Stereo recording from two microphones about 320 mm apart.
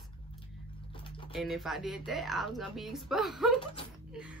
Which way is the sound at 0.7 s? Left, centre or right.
Centre.